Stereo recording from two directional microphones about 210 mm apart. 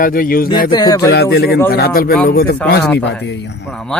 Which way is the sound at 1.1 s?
50° left (ahead or behind).